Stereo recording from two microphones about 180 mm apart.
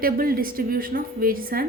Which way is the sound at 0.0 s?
55° right (ahead or behind).